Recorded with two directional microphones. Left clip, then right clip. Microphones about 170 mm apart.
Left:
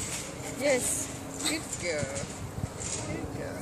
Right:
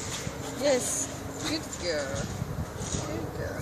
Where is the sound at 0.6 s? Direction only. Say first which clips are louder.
Right 1 dB; 5° left (ahead or behind).